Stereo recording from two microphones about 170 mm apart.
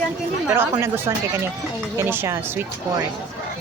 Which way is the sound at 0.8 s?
15° right (ahead or behind).